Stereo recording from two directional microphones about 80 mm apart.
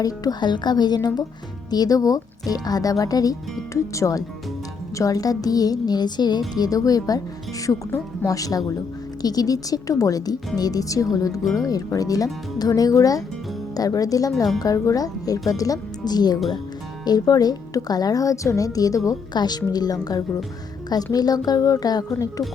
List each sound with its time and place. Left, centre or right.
0.0 s a woman's voice: left
6.6 s a woman's voice: left
7.7 s speech: left
8.3 s a woman's voice: left
19.3 s a woman's voice: left